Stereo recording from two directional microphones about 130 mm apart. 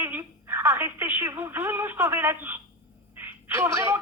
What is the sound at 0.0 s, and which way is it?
Telephone, 15° right (ahead or behind).